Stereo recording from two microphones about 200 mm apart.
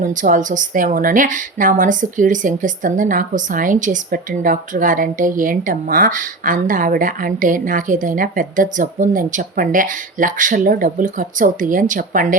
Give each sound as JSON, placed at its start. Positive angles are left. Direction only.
{"t": 0.0, "sound": "a woman's voice", "side_deg": -40}